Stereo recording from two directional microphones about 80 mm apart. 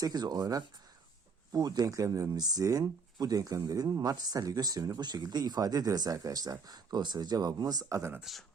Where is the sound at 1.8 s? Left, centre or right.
Right.